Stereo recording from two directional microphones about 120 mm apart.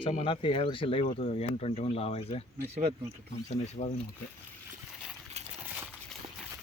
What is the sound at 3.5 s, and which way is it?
Speech, 90° left.